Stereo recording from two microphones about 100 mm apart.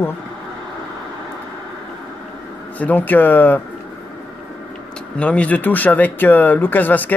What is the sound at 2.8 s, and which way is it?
Speech, 15° left (ahead or behind).